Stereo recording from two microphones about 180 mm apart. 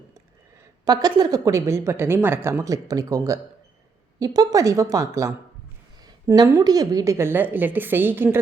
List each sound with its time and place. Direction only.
0.9 s a woman's voice: 20° right (ahead or behind)